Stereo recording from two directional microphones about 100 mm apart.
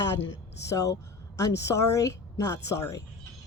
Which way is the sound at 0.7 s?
30° left (ahead or behind).